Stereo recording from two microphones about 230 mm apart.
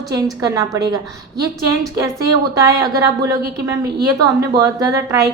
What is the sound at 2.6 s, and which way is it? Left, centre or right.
A woman's voice, centre.